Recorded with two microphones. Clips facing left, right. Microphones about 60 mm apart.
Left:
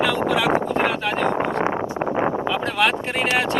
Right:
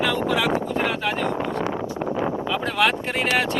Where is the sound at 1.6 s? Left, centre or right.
Left.